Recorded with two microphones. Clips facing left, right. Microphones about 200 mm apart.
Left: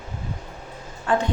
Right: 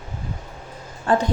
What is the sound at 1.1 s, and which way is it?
Speech, 40° right (ahead or behind).